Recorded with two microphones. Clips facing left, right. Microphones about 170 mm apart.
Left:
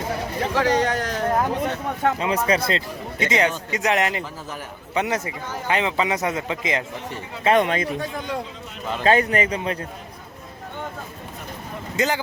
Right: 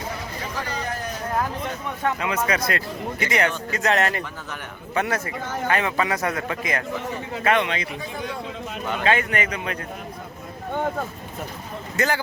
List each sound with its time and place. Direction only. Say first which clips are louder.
0.5 s speech: left 11 dB; 90° left
1.4 s a man's voice: left 4 dB; 30° left (ahead or behind)
7.5 s a man's voice: left 5 dB; 45° left (ahead or behind)
8.9 s a man's voice: left 4 dB; 35° left (ahead or behind)
11.9 s speech: left 1 dB; 20° left (ahead or behind)